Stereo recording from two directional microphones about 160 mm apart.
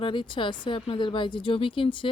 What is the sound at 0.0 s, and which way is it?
Speech, 30° left (ahead or behind).